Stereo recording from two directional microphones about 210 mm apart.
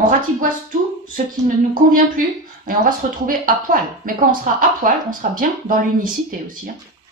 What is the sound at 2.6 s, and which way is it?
Speech, 40° right (ahead or behind).